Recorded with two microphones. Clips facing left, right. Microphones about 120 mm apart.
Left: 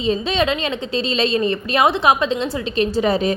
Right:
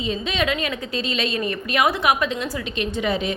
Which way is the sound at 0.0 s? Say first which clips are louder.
Left 5 dB; 30° left (ahead or behind).